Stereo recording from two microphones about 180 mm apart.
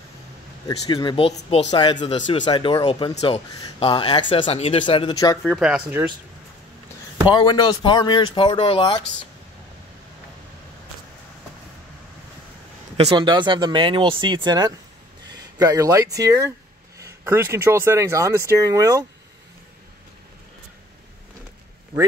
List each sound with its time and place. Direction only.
0.7 s speech: 20° left (ahead or behind)
1.7 s speech: 25° left (ahead or behind)
5.4 s speech: centre (ahead or behind)
7.3 s speech: 25° left (ahead or behind)
12.9 s speech: 30° right (ahead or behind)